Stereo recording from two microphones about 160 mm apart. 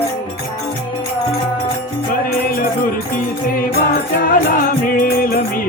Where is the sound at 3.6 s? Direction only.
65° left (ahead or behind).